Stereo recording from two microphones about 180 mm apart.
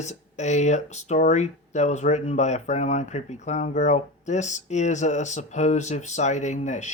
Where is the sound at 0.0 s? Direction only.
40° left (ahead or behind).